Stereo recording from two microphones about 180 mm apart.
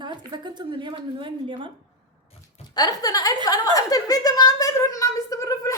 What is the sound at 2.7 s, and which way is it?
Speech, 20° left (ahead or behind).